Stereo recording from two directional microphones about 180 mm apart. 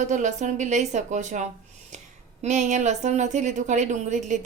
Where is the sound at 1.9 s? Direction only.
40° right (ahead or behind).